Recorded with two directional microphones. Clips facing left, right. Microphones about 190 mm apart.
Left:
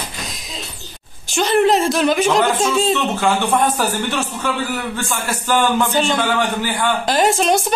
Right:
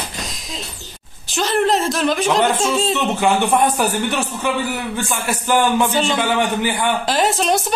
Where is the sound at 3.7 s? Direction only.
15° right (ahead or behind).